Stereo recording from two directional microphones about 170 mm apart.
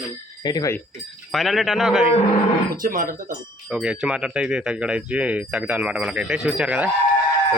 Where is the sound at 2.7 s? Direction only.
55° right (ahead or behind).